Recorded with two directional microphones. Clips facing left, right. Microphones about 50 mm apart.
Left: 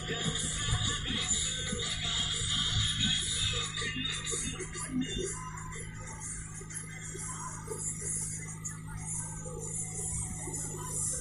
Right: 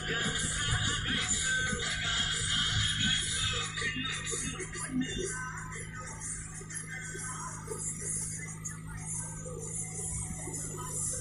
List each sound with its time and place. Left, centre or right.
0.0 s music: right